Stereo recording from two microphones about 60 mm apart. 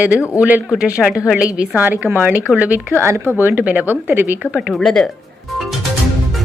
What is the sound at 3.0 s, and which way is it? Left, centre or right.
Speech, right.